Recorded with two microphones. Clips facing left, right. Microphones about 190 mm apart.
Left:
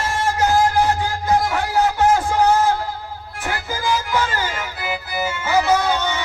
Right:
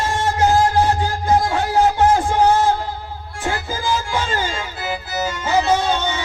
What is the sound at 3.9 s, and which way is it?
Music, 25° right (ahead or behind).